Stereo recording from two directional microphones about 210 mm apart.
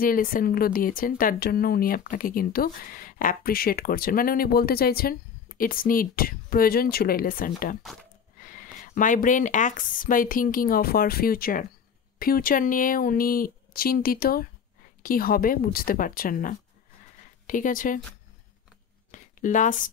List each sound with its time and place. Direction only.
0.0 s speech: 40° left (ahead or behind)
7.8 s speech: centre (ahead or behind)
8.4 s speech: 40° left (ahead or behind)
19.1 s a sound: 35° left (ahead or behind)